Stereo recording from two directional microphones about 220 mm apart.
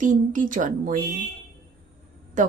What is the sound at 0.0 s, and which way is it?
Speech, 35° right (ahead or behind).